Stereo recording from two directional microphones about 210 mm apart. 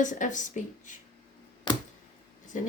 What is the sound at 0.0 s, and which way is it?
Speech, 35° left (ahead or behind).